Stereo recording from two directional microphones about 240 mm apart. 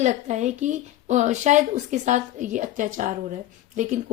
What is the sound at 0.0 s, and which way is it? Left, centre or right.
Speech, right.